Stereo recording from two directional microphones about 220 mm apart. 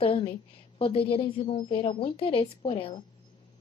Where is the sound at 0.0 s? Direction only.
25° left (ahead or behind).